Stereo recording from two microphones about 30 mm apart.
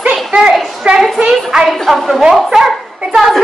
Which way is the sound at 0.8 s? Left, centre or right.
Right.